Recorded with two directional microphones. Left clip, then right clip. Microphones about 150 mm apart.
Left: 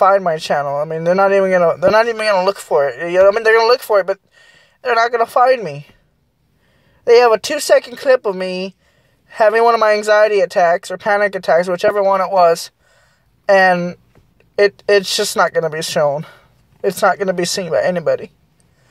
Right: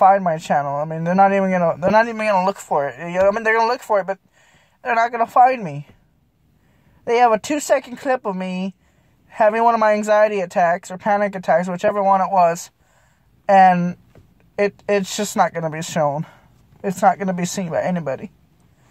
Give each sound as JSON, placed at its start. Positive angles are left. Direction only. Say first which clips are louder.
{"t": 0.0, "sound": "a man's voice", "louder": "left 2 dB", "side_deg": 15}
{"t": 7.1, "sound": "speech", "louder": "left 5 dB", "side_deg": 20}